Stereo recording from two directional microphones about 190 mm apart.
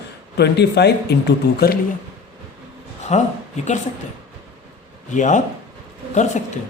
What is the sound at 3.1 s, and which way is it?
Speech, 35° left (ahead or behind).